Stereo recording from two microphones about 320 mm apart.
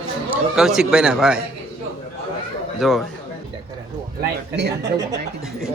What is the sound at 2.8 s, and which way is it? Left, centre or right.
Speech, centre.